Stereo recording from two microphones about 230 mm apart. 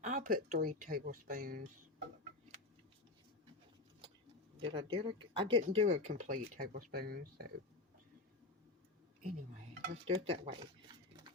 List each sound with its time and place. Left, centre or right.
0.0 s speech: right
4.6 s speech: right
10.1 s speech: right